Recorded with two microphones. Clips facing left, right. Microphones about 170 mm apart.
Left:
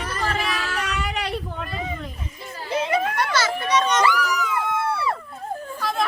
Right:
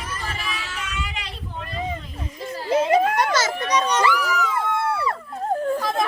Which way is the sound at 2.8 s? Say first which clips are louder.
Right 4 dB; 40° right (ahead or behind).